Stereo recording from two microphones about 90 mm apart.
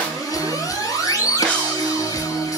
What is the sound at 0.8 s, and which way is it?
Music, 40° left (ahead or behind).